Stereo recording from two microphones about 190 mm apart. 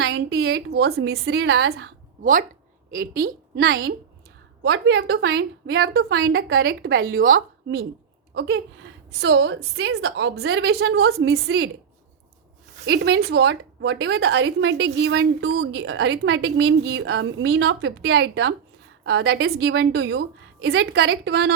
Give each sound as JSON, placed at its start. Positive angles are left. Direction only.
{"t": 0.0, "sound": "a woman's voice", "side_deg": -60}
{"t": 6.7, "sound": "a woman's voice", "side_deg": -60}
{"t": 8.3, "sound": "a woman's voice", "side_deg": -65}
{"t": 12.8, "sound": "a woman's voice", "side_deg": -65}